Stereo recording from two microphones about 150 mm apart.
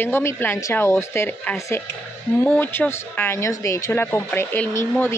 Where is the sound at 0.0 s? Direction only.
15° left (ahead or behind).